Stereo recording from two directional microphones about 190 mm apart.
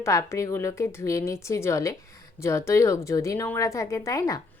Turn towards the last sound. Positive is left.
turn(degrees=15)  # may be behind; listen again after turning